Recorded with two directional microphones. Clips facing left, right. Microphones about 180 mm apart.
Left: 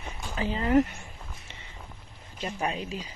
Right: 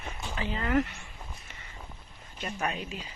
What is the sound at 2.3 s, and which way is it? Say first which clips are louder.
Speech: left 2 dB; 30° left (ahead or behind).